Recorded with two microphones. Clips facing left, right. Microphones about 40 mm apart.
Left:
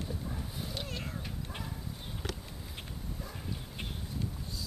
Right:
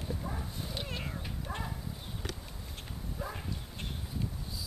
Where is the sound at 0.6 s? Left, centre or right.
Centre.